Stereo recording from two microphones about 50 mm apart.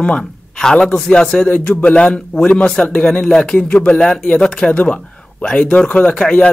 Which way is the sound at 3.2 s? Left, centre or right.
Centre.